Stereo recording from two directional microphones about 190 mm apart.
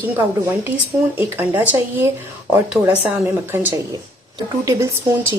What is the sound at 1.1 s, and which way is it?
Speech, 10° right (ahead or behind).